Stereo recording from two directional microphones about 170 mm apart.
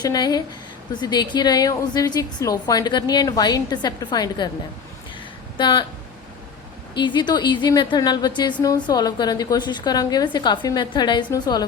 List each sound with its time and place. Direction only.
0.0 s a woman's voice: 25° left (ahead or behind)
5.5 s a woman's voice: 25° left (ahead or behind)
6.9 s a woman's voice: 25° left (ahead or behind)